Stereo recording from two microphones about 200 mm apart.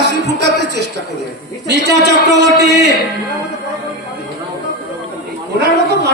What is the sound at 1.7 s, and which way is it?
Speech, 55° right (ahead or behind).